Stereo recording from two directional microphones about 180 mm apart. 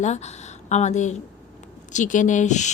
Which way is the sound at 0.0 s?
40° left (ahead or behind).